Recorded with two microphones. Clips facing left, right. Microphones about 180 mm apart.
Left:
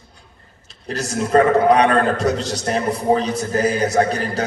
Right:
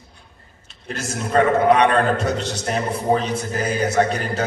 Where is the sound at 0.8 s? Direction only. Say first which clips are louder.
Left 4 dB; 35° left (ahead or behind).